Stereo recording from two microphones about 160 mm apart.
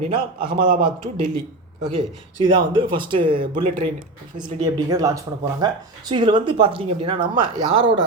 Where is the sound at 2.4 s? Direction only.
30° right (ahead or behind).